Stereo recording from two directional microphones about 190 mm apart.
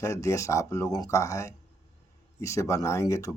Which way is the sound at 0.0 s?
15° left (ahead or behind).